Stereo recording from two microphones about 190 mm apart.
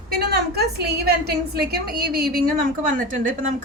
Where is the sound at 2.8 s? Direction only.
45° right (ahead or behind).